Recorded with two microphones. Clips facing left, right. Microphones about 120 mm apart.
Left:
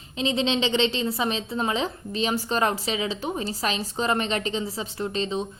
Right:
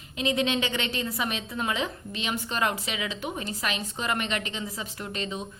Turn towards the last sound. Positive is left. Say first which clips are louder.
# left 6 dB
turn(degrees=30)  # may be behind; listen again after turning